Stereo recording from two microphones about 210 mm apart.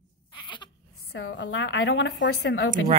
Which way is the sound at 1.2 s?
65° left (ahead or behind).